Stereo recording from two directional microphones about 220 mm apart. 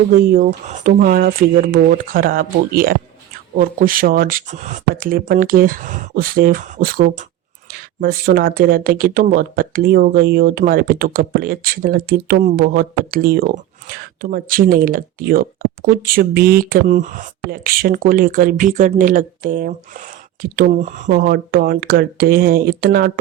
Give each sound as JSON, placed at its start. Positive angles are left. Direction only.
{"t": 0.1, "sound": "speech", "side_deg": -40}
{"t": 21.1, "sound": "speech", "side_deg": -45}